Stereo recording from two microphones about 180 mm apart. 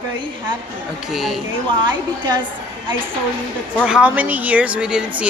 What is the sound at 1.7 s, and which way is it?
Speech, 25° right (ahead or behind).